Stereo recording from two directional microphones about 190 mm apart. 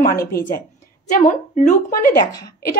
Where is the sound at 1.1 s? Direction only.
40° left (ahead or behind).